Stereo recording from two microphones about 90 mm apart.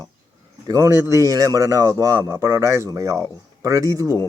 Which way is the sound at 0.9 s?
30° right (ahead or behind).